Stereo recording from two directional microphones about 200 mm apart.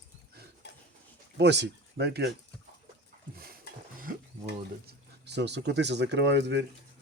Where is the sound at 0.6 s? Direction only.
55° left (ahead or behind).